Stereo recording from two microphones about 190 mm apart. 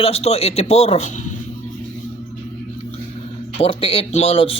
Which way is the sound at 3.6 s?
30° left (ahead or behind).